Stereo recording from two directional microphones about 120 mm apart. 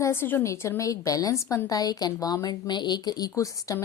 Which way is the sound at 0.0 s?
20° left (ahead or behind).